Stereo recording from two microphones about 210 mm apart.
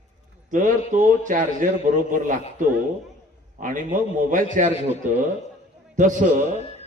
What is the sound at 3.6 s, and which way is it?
A man's voice, 40° right (ahead or behind).